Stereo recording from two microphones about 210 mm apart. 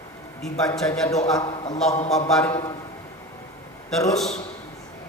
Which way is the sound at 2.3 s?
5° left (ahead or behind).